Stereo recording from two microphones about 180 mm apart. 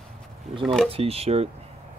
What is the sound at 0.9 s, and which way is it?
Speech, 35° right (ahead or behind).